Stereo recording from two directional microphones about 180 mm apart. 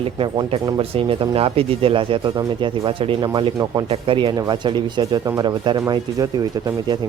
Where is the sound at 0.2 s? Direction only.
30° right (ahead or behind).